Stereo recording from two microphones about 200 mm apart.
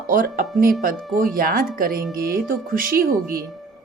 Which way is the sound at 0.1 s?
45° right (ahead or behind).